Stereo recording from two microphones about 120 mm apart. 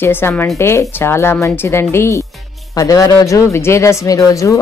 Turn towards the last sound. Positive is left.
turn(degrees=25)  # may be behind; listen again after turning